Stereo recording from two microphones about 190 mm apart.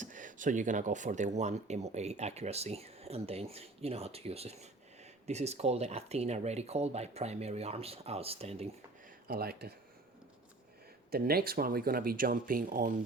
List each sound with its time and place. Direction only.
0.0 s speech: 45° right (ahead or behind)
9.2 s speech: 55° right (ahead or behind)
11.1 s speech: 55° right (ahead or behind)